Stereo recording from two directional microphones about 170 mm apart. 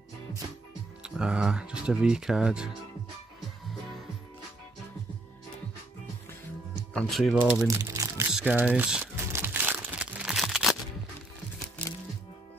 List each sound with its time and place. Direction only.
1.0 s speech: 5° right (ahead or behind)
6.9 s speech: 5° left (ahead or behind)
7.6 s crumpling: 20° right (ahead or behind)
8.3 s crumpling: 5° right (ahead or behind)